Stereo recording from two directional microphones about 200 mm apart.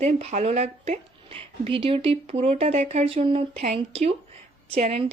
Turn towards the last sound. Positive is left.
turn(degrees=-30)  # may be behind; listen again after turning